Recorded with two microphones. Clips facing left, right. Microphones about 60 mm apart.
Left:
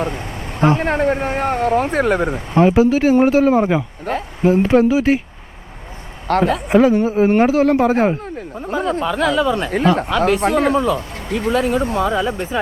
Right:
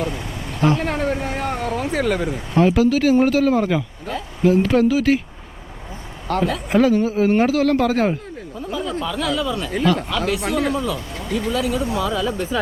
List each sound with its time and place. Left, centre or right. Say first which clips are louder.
0.6 s speech: left 4 dB; left
2.6 s speech: left 3 dB; left
4.1 s a man's voice: left 6 dB; left
4.4 s speech: left 2 dB; left
6.2 s a man's voice: left 5 dB; left
6.7 s speech: left 2 dB; left
8.5 s a man's voice: left 5 dB; left